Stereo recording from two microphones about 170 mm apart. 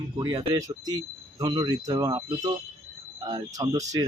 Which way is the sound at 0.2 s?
15° right (ahead or behind).